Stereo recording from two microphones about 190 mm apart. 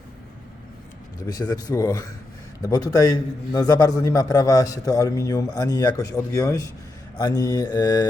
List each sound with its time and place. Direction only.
1.3 s a man's voice: 20° left (ahead or behind)